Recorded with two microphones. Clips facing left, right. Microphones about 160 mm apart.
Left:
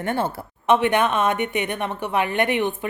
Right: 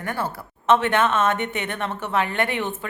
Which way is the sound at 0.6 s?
15° left (ahead or behind).